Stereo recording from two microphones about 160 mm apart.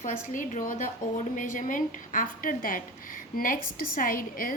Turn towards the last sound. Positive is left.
turn(degrees=60)  # may be behind; listen again after turning